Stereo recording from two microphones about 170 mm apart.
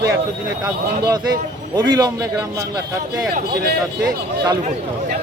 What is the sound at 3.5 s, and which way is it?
Speech, 65° right (ahead or behind).